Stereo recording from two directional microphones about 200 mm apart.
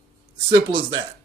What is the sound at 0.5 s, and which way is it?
Speech, 20° right (ahead or behind).